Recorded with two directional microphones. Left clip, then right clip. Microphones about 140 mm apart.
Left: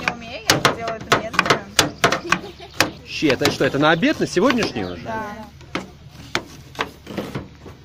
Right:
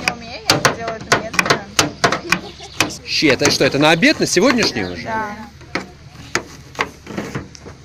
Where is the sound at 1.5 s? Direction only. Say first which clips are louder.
Right 1 dB; 5° left (ahead or behind).